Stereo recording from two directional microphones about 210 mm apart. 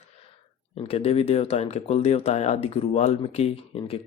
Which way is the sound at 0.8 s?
30° left (ahead or behind).